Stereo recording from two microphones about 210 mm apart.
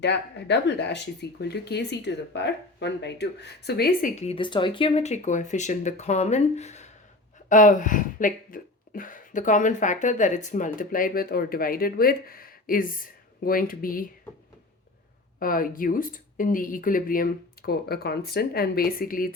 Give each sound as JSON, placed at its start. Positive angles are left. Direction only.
{"t": 0.0, "sound": "speech", "side_deg": 55}
{"t": 4.1, "sound": "speech", "side_deg": 30}
{"t": 15.4, "sound": "speech", "side_deg": 40}